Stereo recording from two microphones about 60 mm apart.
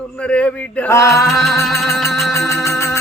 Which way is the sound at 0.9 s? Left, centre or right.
Left.